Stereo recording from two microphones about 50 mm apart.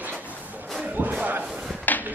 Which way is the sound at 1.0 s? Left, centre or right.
Right.